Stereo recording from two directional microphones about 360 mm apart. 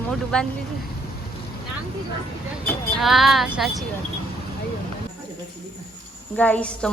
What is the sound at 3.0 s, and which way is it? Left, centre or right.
Speech, centre.